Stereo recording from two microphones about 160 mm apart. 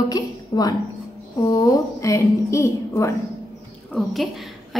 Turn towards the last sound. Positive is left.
turn(degrees=0)  # may be behind; listen again after turning